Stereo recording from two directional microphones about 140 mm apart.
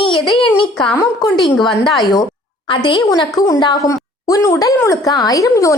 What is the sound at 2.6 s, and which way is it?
A woman's voice, 35° left (ahead or behind).